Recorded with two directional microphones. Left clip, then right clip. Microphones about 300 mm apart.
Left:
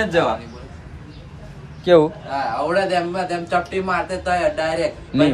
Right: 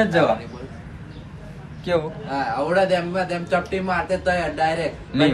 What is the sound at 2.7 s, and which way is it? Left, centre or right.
A man's voice, centre.